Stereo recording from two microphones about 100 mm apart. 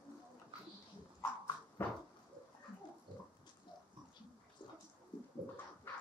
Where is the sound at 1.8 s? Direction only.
25° left (ahead or behind).